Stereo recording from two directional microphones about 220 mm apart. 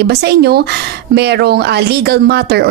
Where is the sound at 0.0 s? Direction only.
50° right (ahead or behind).